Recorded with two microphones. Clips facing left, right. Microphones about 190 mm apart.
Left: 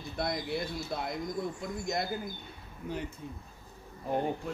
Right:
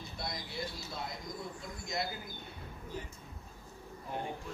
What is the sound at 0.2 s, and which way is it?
Speech, 55° left (ahead or behind).